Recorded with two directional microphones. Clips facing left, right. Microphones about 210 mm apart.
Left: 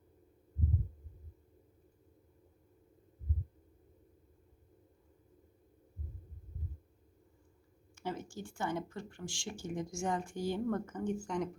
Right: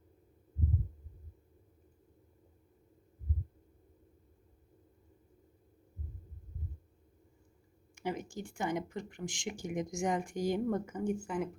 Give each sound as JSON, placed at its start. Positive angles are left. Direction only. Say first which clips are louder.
{"t": 7.9, "sound": "speech", "louder": "right 3 dB", "side_deg": -15}